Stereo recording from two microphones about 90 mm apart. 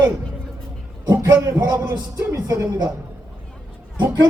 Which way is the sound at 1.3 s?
40° right (ahead or behind).